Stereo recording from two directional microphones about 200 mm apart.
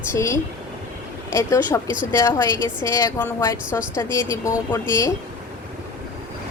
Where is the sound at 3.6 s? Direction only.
5° right (ahead or behind).